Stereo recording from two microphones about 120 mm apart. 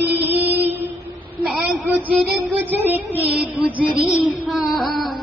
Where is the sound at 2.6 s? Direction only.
15° right (ahead or behind).